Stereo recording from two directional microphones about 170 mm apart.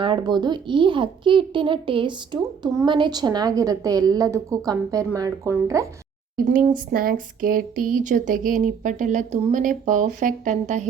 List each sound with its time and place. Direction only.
0.0 s speech: 30° right (ahead or behind)
6.3 s speech: 50° right (ahead or behind)